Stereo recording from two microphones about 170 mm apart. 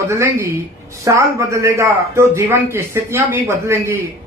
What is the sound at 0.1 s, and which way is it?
A man's voice, 15° right (ahead or behind).